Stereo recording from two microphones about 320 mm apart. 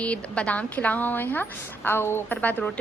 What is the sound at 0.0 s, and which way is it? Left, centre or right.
A woman's voice, centre.